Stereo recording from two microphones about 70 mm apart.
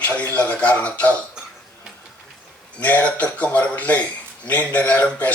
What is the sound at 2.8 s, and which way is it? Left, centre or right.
Speech, left.